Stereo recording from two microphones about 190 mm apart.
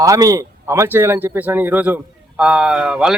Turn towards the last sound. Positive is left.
turn(degrees=-5)  # may be behind; listen again after turning